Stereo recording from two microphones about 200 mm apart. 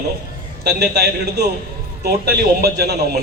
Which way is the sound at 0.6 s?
55° right (ahead or behind).